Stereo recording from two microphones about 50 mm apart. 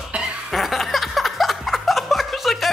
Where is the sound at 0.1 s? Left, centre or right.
Right.